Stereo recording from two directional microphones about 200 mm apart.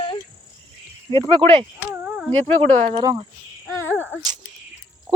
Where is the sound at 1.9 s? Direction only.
10° right (ahead or behind).